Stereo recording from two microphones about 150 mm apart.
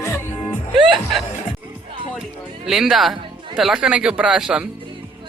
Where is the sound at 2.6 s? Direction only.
5° right (ahead or behind).